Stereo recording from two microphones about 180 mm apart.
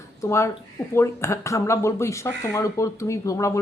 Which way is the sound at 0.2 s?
15° left (ahead or behind).